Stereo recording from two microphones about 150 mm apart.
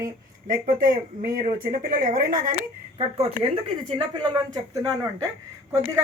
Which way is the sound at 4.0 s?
25° right (ahead or behind).